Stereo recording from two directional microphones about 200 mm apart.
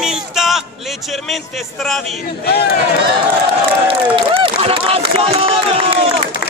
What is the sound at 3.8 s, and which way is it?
Speech, 25° right (ahead or behind).